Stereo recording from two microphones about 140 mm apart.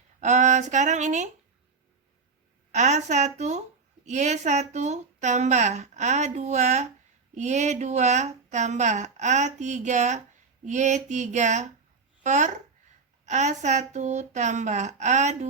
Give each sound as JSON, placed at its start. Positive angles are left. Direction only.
{"t": 0.2, "sound": "a woman's voice", "side_deg": -55}
{"t": 2.7, "sound": "a woman's voice", "side_deg": -55}